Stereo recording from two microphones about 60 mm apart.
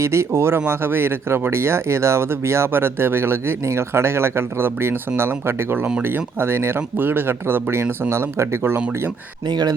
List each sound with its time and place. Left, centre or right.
0.0 s speech: right